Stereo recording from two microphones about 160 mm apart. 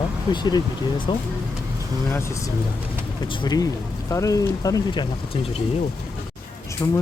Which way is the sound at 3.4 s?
25° left (ahead or behind).